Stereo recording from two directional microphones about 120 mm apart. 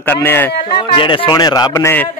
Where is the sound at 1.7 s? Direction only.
20° left (ahead or behind).